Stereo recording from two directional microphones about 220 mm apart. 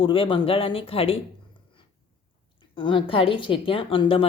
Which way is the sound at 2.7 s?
20° left (ahead or behind).